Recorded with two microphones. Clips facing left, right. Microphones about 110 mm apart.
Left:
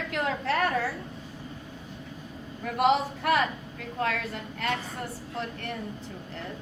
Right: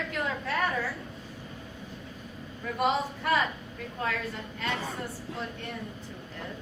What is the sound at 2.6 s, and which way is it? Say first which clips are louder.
A woman's voice: left 4 dB; 65° left (ahead or behind).